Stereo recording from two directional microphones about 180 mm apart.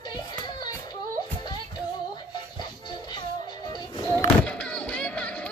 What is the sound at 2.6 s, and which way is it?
Music, 25° left (ahead or behind).